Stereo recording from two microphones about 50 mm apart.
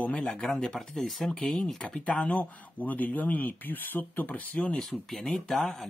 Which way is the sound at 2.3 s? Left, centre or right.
Left.